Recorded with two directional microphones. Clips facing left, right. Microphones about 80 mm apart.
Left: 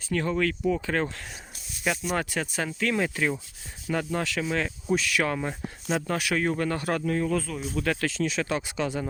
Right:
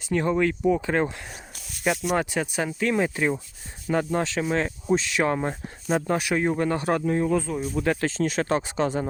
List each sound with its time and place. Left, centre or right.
0.0 s speech: right
2.1 s speech: right